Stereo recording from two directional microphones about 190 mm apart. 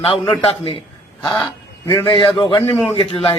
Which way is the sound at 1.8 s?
15° left (ahead or behind).